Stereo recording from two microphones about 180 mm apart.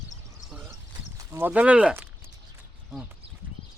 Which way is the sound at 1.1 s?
10° right (ahead or behind).